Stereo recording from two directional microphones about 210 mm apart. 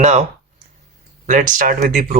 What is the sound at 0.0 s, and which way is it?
Speech, 35° right (ahead or behind).